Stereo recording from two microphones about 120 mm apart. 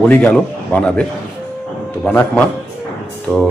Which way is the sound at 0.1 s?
10° left (ahead or behind).